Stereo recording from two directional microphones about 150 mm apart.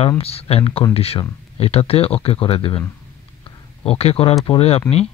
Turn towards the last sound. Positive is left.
turn(degrees=40)  # may be behind; listen again after turning